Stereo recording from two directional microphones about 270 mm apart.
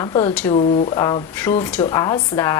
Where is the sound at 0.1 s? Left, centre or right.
Centre.